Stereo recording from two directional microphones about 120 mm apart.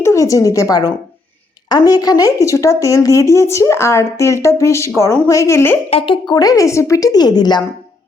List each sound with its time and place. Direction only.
0.0 s a woman's voice: 25° left (ahead or behind)
5.9 s speech: 50° left (ahead or behind)
6.2 s a woman's voice: 30° left (ahead or behind)